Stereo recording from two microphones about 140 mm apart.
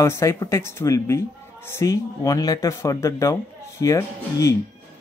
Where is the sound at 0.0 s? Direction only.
20° left (ahead or behind).